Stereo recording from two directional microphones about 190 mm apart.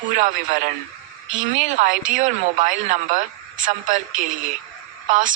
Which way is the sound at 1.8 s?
45° right (ahead or behind).